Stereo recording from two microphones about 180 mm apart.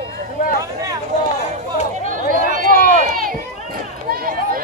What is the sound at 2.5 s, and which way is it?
Run, 45° right (ahead or behind).